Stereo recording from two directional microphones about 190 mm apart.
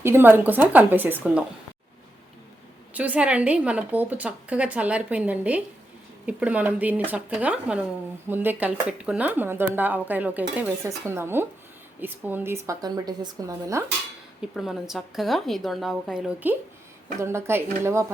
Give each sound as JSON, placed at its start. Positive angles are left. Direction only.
{"t": 0.0, "sound": "a woman's voice", "side_deg": -10}
{"t": 2.9, "sound": "a woman's voice", "side_deg": -10}
{"t": 14.5, "sound": "a woman's voice", "side_deg": 0}